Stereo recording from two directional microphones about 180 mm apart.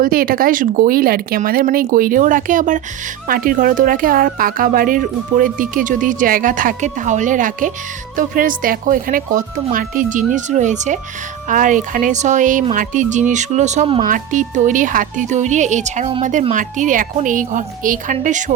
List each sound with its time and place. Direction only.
0.0 s speech: 50° right (ahead or behind)